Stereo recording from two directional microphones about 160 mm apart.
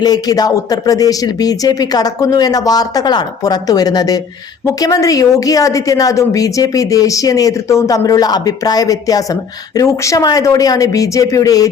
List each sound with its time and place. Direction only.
0.0 s a woman's voice: 25° left (ahead or behind)